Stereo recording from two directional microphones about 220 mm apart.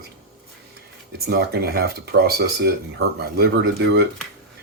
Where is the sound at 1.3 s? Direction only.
45° right (ahead or behind).